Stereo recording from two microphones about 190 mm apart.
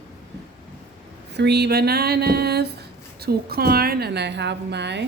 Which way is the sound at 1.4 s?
60° right (ahead or behind).